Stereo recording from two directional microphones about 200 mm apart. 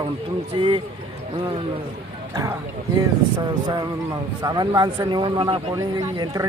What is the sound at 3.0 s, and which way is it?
Speech, 20° right (ahead or behind).